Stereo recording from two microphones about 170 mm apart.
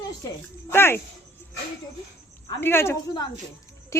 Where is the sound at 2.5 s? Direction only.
15° left (ahead or behind).